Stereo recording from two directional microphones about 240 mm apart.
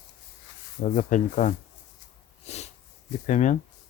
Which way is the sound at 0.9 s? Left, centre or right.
Left.